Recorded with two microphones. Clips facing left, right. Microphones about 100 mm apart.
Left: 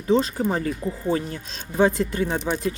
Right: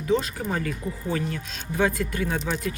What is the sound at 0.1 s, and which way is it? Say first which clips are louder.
Speech: left 4 dB; 30° left (ahead or behind).